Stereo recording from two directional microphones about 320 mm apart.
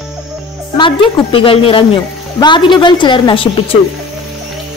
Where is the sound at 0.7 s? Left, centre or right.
Centre.